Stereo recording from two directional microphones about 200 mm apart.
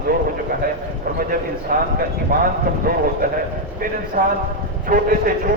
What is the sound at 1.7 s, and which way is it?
A man's voice, 45° right (ahead or behind).